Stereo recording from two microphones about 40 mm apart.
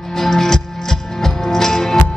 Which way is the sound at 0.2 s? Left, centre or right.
Centre.